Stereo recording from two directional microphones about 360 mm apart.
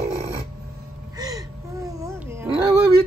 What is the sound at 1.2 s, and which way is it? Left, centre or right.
Gasp, centre.